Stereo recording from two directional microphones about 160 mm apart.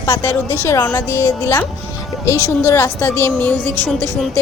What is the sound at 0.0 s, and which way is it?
A woman's voice, 20° left (ahead or behind).